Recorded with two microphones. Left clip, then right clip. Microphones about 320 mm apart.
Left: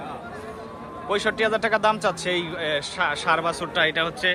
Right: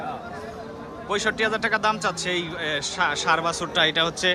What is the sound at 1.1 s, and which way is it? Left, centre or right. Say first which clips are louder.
A man's voice: left 1 dB; centre.